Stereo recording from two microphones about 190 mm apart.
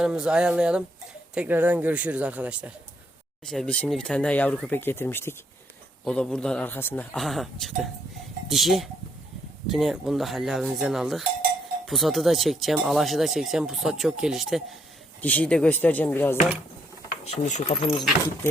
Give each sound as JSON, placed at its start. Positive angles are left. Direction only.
{"t": 0.0, "sound": "speech", "side_deg": -5}
{"t": 17.2, "sound": "speech", "side_deg": 35}